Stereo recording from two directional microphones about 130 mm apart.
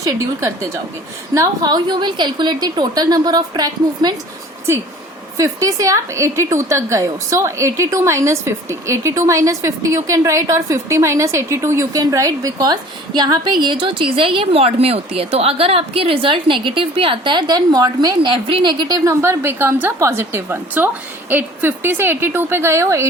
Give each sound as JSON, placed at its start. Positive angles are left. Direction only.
{"t": 0.0, "sound": "a woman's voice", "side_deg": -25}
{"t": 5.4, "sound": "a woman's voice", "side_deg": -25}
{"t": 19.0, "sound": "a woman's voice", "side_deg": -20}